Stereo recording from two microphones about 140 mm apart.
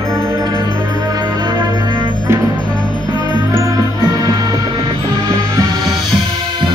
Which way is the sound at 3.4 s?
20° right (ahead or behind).